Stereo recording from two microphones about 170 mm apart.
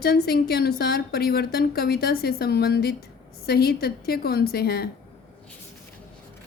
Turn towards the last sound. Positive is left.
turn(degrees=65)  # may be behind; listen again after turning